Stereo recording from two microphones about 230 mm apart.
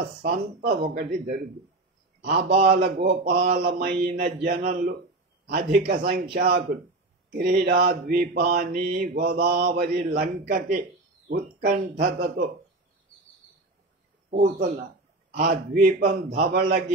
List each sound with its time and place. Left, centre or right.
0.2 s mantra: right
11.2 s speech: right
12.0 s mantra: right
14.3 s mantra: right